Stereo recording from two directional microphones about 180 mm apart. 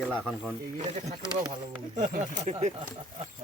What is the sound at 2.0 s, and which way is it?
Speech, 40° right (ahead or behind).